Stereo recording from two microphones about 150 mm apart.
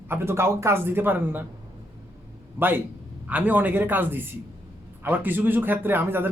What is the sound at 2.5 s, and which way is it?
Speech, 15° right (ahead or behind).